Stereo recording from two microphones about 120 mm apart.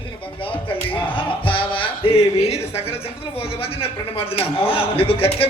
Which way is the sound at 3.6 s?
55° left (ahead or behind).